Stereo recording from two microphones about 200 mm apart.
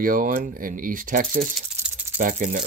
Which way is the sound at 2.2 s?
40° right (ahead or behind).